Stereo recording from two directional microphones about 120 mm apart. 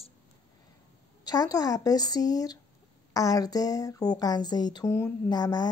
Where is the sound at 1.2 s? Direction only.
30° left (ahead or behind).